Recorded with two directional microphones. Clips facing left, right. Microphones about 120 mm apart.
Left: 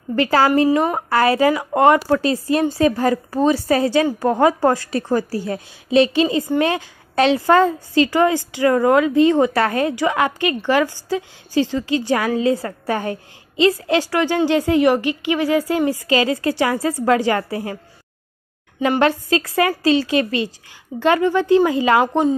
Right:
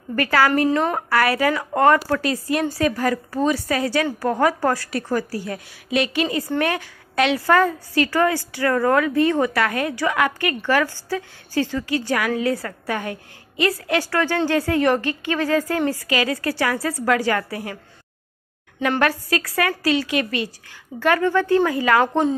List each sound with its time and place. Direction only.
0.1 s a woman's voice: 25° left (ahead or behind)
0.7 s a woman's voice: 10° left (ahead or behind)
1.1 s a woman's voice: 25° left (ahead or behind)
16.1 s a woman's voice: 25° left (ahead or behind)
18.8 s a woman's voice: 20° left (ahead or behind)
22.0 s a woman's voice: 5° left (ahead or behind)